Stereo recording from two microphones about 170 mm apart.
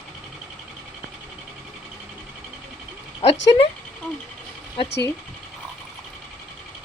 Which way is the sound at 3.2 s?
35° left (ahead or behind).